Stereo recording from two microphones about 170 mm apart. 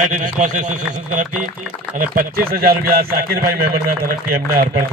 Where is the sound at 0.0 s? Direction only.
50° right (ahead or behind).